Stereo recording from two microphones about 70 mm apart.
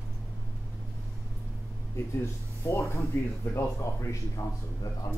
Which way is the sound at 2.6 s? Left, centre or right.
Left.